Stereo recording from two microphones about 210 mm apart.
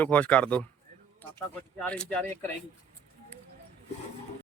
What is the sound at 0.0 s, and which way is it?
Speech, 5° left (ahead or behind).